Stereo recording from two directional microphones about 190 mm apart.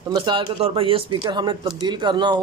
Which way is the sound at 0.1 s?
25° right (ahead or behind).